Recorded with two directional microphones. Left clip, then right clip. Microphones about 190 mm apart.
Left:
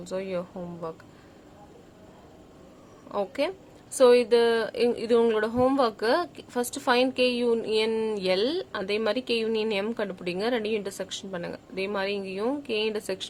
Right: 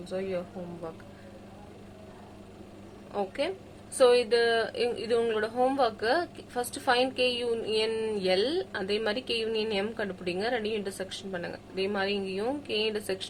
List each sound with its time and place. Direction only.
0.1 s speech: 45° left (ahead or behind)
3.1 s speech: 45° left (ahead or behind)